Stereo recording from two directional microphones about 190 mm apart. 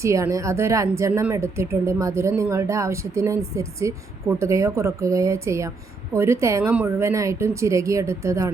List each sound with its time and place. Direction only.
0.0 s speech: 15° right (ahead or behind)